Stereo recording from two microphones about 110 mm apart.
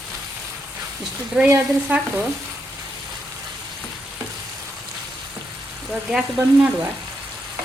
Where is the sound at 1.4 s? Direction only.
15° right (ahead or behind).